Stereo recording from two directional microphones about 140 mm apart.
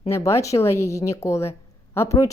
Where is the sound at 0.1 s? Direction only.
20° left (ahead or behind).